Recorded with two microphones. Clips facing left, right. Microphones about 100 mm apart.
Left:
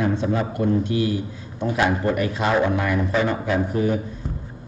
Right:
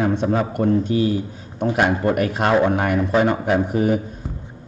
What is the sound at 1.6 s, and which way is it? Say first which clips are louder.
Speech: right 2 dB; 55° right (ahead or behind).